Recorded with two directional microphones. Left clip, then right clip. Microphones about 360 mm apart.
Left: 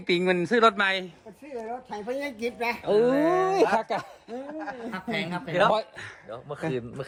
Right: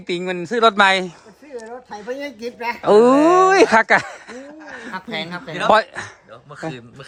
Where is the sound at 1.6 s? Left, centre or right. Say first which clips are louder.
Right 2 dB; centre.